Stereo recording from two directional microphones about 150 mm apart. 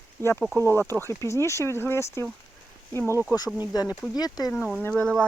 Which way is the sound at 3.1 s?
15° right (ahead or behind).